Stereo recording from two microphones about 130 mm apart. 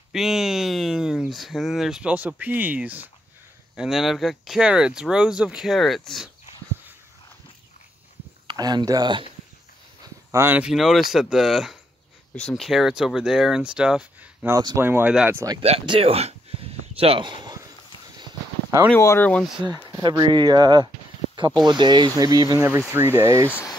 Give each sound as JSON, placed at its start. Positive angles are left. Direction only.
{"t": 0.1, "sound": "speech", "side_deg": -5}
{"t": 8.5, "sound": "speech", "side_deg": -35}
{"t": 10.3, "sound": "speech", "side_deg": -20}
{"t": 10.6, "sound": "speech", "side_deg": 0}
{"t": 14.5, "sound": "speech", "side_deg": -30}
{"t": 14.8, "sound": "speech", "side_deg": -15}
{"t": 15.8, "sound": "speech", "side_deg": -45}
{"t": 18.9, "sound": "speech", "side_deg": 20}
{"t": 19.6, "sound": "speech", "side_deg": -35}